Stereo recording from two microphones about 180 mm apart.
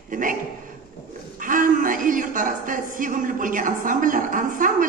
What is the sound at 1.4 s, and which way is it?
A woman's voice, 50° right (ahead or behind).